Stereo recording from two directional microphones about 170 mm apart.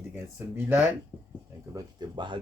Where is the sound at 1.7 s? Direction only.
20° right (ahead or behind).